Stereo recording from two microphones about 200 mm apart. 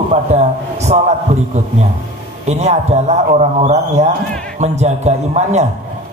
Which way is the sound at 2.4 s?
35° right (ahead or behind).